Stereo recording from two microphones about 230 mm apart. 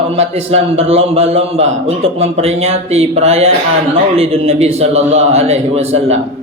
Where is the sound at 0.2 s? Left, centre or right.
Right.